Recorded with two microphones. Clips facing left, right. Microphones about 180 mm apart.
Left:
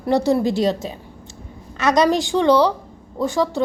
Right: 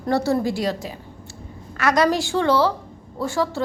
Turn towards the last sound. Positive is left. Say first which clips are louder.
# left 3 dB
turn(degrees=15)  # may be behind; listen again after turning